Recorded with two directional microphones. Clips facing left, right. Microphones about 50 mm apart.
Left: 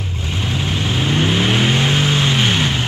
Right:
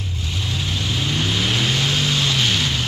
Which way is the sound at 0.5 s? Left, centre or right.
Left.